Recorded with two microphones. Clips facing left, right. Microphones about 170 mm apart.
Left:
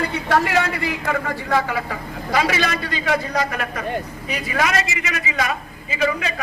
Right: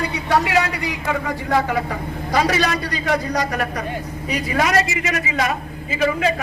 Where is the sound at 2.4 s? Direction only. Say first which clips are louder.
Right 2 dB; 45° right (ahead or behind).